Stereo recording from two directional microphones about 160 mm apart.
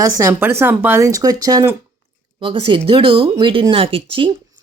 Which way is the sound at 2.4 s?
30° right (ahead or behind).